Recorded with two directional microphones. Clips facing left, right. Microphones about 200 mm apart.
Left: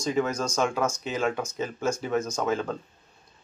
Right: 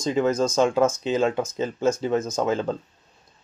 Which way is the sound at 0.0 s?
25° right (ahead or behind).